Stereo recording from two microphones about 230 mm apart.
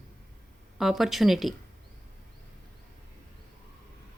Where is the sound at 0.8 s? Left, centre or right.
Centre.